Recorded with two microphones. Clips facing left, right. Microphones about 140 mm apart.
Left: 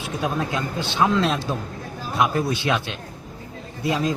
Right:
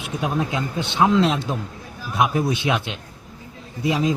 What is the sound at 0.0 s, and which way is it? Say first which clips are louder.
Speech: right 1 dB; 20° right (ahead or behind).